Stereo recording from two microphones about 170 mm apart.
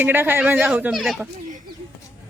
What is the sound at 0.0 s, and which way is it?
A woman's voice, 10° right (ahead or behind).